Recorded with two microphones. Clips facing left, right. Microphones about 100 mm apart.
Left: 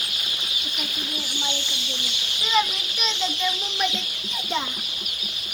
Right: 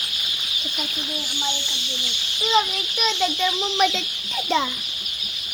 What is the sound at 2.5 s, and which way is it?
Speech, 45° right (ahead or behind).